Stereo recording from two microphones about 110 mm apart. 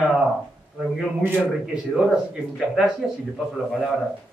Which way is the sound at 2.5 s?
5° right (ahead or behind).